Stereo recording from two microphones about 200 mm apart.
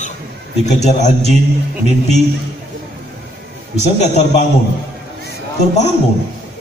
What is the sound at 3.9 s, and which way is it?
Speech, 35° left (ahead or behind).